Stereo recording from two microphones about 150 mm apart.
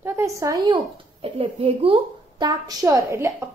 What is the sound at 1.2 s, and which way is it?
A woman's voice, 40° right (ahead or behind).